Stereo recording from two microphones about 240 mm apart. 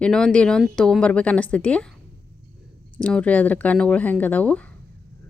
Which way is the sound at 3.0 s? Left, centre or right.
Centre.